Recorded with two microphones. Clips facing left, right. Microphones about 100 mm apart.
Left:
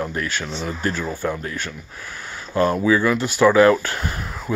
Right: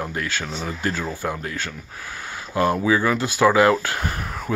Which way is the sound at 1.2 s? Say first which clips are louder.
Left 2 dB; 40° right (ahead or behind).